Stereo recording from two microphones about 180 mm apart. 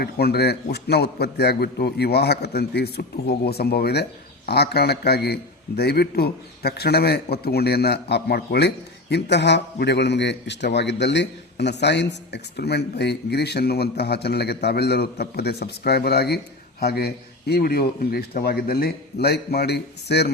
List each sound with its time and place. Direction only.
0.0 s a man's voice: 65° left (ahead or behind)